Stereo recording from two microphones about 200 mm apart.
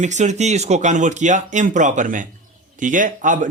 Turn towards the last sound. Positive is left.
turn(degrees=-40)  # may be behind; listen again after turning